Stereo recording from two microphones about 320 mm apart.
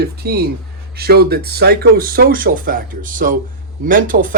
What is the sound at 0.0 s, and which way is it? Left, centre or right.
Speech, right.